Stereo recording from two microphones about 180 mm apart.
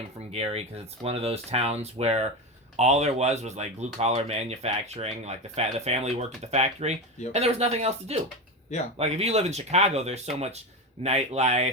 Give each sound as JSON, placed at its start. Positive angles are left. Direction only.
{"t": 0.3, "sound": "speech", "side_deg": -35}